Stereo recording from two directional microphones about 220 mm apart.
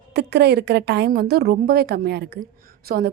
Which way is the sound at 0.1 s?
50° right (ahead or behind).